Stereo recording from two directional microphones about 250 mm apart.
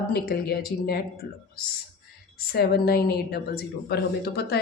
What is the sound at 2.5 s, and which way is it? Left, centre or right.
Speech, left.